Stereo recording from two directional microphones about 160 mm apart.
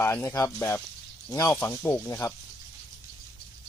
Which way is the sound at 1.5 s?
10° left (ahead or behind).